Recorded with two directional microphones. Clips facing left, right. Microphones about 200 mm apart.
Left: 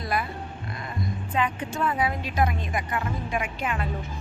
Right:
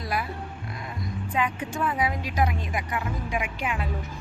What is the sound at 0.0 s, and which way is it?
Speech, 5° right (ahead or behind).